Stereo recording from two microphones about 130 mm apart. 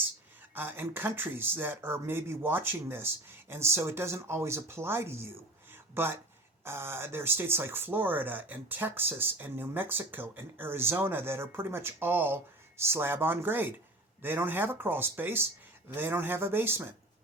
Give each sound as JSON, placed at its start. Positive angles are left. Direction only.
{"t": 0.5, "sound": "speech", "side_deg": -15}